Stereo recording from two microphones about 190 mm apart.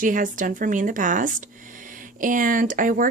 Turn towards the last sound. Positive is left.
turn(degrees=-45)  # may be behind; listen again after turning